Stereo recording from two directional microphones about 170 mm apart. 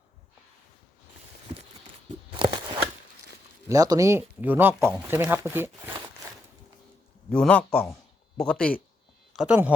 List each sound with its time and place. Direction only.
2.3 s a sound: 30° right (ahead or behind)
3.7 s speech: 20° right (ahead or behind)
7.3 s a man's voice: 5° left (ahead or behind)
9.3 s speech: 5° right (ahead or behind)